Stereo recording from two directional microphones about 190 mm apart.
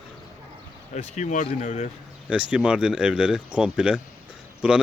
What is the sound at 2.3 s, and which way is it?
Speech, 5° right (ahead or behind).